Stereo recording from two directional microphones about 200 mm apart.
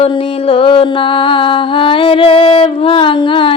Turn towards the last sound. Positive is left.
turn(degrees=25)  # may be behind; listen again after turning